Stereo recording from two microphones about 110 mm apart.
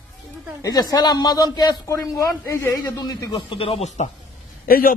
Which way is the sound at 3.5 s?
60° left (ahead or behind).